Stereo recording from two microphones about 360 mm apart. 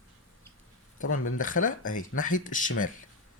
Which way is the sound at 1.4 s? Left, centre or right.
Left.